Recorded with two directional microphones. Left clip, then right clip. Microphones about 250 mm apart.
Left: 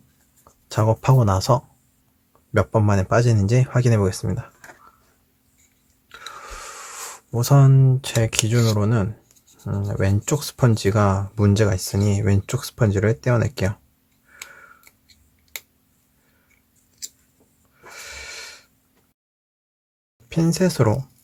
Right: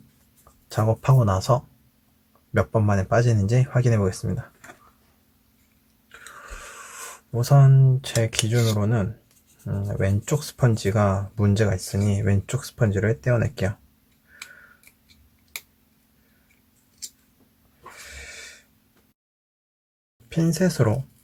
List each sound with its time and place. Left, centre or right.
0.7 s speech: centre
6.1 s a sound: left
9.6 s speech: centre
17.9 s snort: left
20.3 s speech: centre